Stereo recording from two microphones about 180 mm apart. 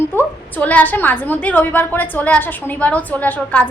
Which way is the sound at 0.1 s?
10° left (ahead or behind).